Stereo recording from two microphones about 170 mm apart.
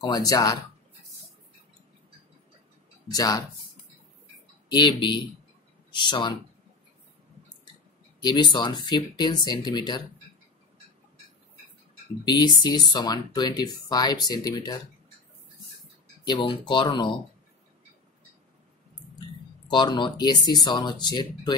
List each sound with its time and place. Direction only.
0.0 s speech: 25° left (ahead or behind)
3.1 s speech: 20° left (ahead or behind)
4.6 s speech: 25° left (ahead or behind)
8.2 s speech: 25° left (ahead or behind)
12.3 s speech: 25° left (ahead or behind)
16.3 s speech: 25° left (ahead or behind)
19.7 s speech: 25° left (ahead or behind)